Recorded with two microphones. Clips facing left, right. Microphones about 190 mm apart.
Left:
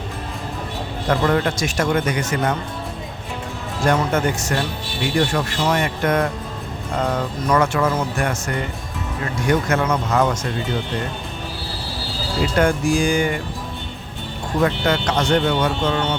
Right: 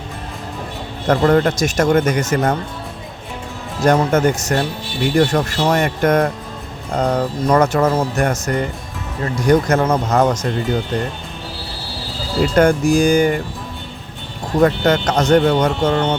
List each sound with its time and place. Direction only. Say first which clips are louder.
1.0 s speech: right 5 dB; 45° right (ahead or behind)
3.8 s speech: right 5 dB; 40° right (ahead or behind)
12.4 s speech: right 5 dB; 45° right (ahead or behind)
14.6 s speech: right 5 dB; 45° right (ahead or behind)